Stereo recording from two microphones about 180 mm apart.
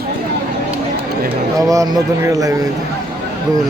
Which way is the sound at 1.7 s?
20° right (ahead or behind).